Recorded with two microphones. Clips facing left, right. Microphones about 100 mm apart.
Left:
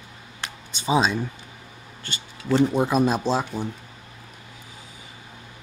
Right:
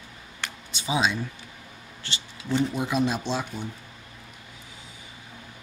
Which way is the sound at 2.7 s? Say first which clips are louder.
Left 5 dB; 45° left (ahead or behind).